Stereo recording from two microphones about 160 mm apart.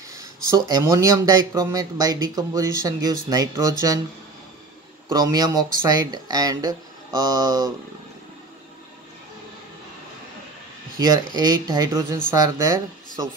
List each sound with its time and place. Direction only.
0.1 s speech: 20° right (ahead or behind)
5.1 s speech: 25° right (ahead or behind)
11.0 s speech: 25° right (ahead or behind)